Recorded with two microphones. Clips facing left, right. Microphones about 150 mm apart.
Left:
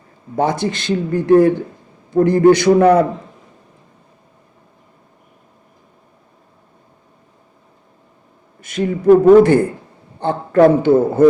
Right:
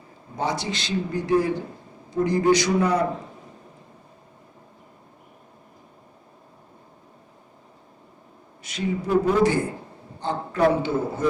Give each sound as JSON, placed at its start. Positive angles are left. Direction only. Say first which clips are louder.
{"t": 0.3, "sound": "a man's voice", "louder": "left 9 dB", "side_deg": 55}
{"t": 8.6, "sound": "a man's voice", "louder": "left 13 dB", "side_deg": 55}